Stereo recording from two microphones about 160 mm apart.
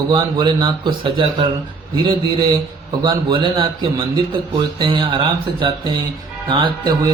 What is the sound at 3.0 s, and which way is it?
A man's voice, 30° right (ahead or behind).